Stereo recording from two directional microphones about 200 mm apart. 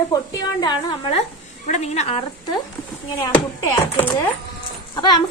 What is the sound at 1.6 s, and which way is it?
Speech, 35° left (ahead or behind).